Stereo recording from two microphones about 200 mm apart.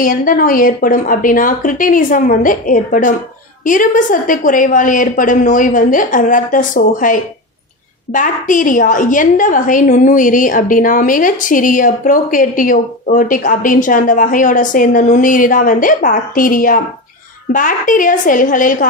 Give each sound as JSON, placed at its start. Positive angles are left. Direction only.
{"t": 0.0, "sound": "a woman's voice", "side_deg": 45}